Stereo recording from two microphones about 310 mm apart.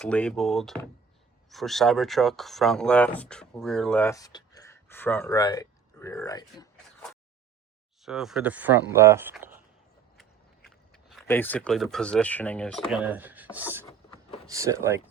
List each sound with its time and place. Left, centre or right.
0.0 s speech: centre
8.0 s speech: centre
10.7 s speech: centre
13.8 s a sound: centre
14.4 s speech: centre